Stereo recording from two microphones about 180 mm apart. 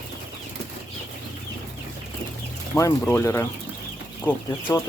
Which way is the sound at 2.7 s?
15° left (ahead or behind).